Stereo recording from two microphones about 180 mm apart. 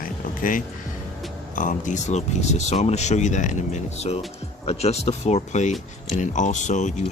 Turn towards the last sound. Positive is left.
turn(degrees=40)  # may be behind; listen again after turning